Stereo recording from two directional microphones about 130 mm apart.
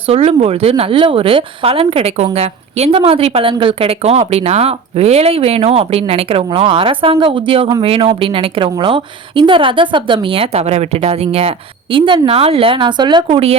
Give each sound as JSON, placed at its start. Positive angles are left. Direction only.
{"t": 0.0, "sound": "a woman's voice", "side_deg": -50}